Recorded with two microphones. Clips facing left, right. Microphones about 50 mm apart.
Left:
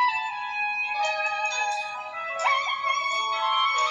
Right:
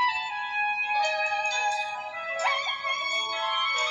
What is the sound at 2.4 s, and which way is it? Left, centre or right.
Music, left.